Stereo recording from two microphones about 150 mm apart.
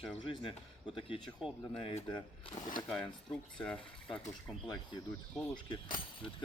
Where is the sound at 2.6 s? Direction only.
60° left (ahead or behind).